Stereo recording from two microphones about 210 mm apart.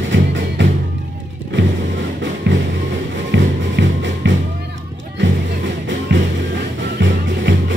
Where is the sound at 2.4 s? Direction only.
55° right (ahead or behind).